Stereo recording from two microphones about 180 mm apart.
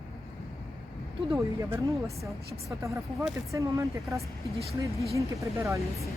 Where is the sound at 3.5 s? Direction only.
15° right (ahead or behind).